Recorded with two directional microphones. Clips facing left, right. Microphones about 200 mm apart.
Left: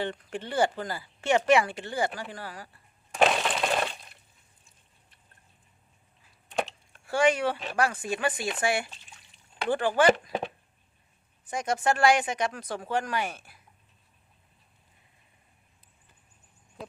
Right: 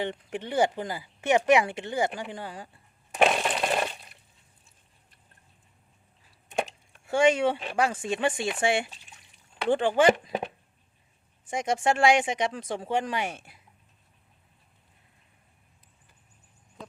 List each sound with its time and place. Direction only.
0.0 s speech: 20° right (ahead or behind)
3.4 s coin: 5° right (ahead or behind)
7.1 s speech: 25° right (ahead or behind)
11.4 s speech: 25° right (ahead or behind)